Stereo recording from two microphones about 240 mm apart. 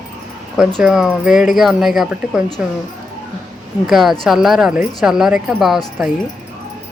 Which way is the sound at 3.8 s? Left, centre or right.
Centre.